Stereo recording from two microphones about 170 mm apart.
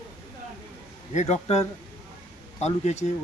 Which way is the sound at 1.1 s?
40° left (ahead or behind).